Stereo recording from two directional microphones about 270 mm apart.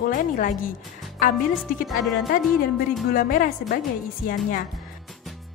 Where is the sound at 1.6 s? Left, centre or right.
Centre.